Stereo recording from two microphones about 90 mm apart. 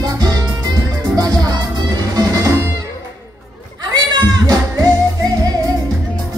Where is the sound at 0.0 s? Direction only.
45° right (ahead or behind).